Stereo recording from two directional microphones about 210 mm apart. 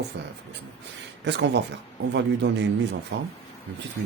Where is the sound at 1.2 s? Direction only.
55° right (ahead or behind).